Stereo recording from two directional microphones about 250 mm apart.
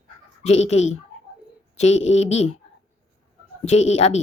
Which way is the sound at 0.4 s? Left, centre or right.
Left.